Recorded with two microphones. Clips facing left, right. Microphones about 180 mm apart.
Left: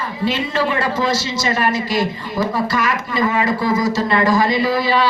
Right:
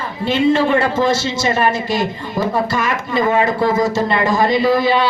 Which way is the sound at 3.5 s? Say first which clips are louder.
Right 2 dB; 60° right (ahead or behind).